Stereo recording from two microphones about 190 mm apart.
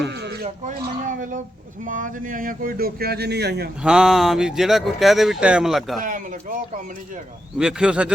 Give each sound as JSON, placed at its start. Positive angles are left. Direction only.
{"t": 0.0, "sound": "a sound", "side_deg": -60}
{"t": 0.7, "sound": "speech", "side_deg": -40}
{"t": 3.8, "sound": "speech", "side_deg": -5}
{"t": 6.0, "sound": "speech", "side_deg": -45}
{"t": 7.6, "sound": "speech", "side_deg": -5}